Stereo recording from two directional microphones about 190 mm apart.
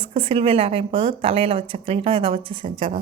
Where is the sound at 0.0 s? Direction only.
30° right (ahead or behind).